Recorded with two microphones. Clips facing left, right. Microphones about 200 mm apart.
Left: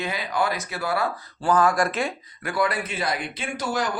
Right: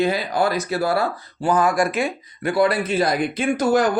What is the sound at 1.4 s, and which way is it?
Speech, 15° right (ahead or behind).